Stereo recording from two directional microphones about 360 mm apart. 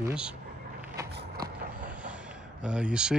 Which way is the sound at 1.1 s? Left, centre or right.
Right.